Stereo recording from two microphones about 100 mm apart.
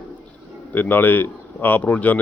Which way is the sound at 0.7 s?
20° left (ahead or behind).